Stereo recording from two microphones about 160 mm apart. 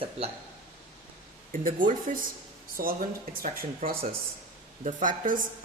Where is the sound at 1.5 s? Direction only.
60° right (ahead or behind).